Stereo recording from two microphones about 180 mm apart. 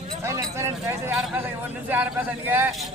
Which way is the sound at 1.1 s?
10° right (ahead or behind).